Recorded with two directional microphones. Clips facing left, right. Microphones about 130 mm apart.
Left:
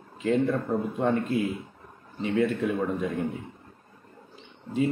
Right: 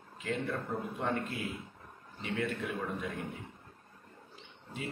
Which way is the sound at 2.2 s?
25° left (ahead or behind).